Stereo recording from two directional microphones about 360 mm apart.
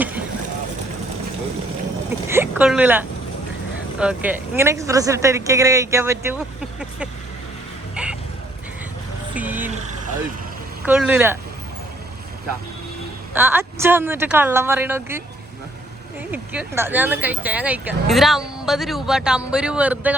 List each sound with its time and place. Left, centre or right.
2.2 s speech: centre
8.0 s vehicle: centre
9.3 s vehicle: centre
10.8 s speech: centre
13.3 s speech: centre
16.3 s speech: centre